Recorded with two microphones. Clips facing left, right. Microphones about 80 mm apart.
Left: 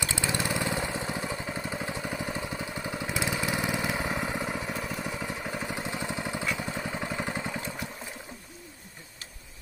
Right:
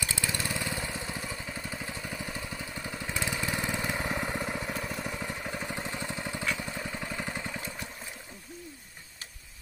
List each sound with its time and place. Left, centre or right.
0.1 s vehicle: left